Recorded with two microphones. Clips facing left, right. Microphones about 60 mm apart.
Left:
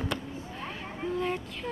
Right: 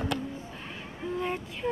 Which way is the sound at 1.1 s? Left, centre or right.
Centre.